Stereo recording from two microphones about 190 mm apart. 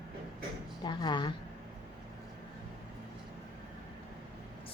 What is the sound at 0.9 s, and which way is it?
Speech, 25° left (ahead or behind).